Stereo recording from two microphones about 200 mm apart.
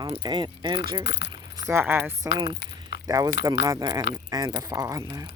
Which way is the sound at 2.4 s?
60° left (ahead or behind).